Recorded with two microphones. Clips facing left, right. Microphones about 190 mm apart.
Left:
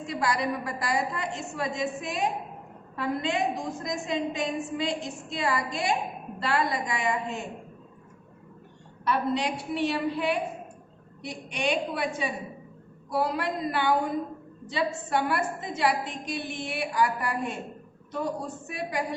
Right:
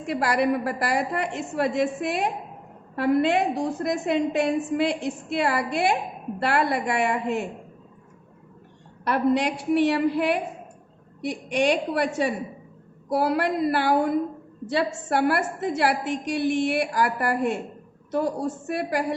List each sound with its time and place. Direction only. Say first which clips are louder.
0.0 s a woman's voice: right 5 dB; 60° right (ahead or behind)
9.0 s a woman's voice: right 5 dB; 65° right (ahead or behind)